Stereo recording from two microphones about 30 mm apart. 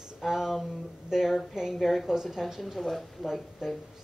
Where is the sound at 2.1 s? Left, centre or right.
Centre.